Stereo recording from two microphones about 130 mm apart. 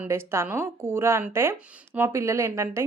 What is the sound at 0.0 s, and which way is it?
A woman's voice, 20° right (ahead or behind).